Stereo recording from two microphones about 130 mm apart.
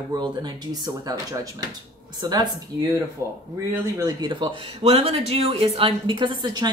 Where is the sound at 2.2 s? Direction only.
35° right (ahead or behind).